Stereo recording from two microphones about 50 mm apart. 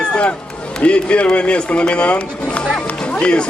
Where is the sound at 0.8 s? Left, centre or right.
Left.